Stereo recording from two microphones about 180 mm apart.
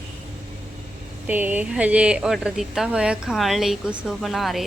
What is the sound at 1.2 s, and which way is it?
Speech, 10° right (ahead or behind).